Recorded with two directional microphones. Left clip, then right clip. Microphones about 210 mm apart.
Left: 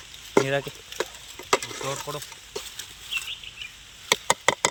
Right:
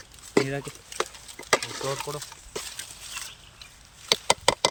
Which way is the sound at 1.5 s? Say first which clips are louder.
Even; 25° right (ahead or behind).